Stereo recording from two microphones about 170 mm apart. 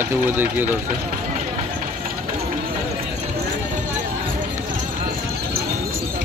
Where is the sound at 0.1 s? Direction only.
10° right (ahead or behind).